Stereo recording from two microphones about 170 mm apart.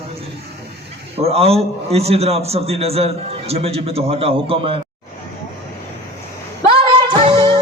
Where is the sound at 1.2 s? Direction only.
35° right (ahead or behind).